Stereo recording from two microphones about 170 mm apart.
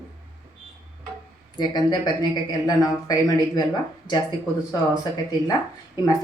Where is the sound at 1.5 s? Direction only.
25° left (ahead or behind).